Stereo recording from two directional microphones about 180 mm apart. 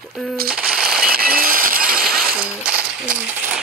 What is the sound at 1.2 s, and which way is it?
Music, 55° right (ahead or behind).